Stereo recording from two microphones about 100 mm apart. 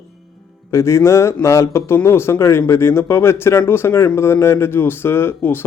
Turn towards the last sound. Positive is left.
turn(degrees=25)  # may be behind; listen again after turning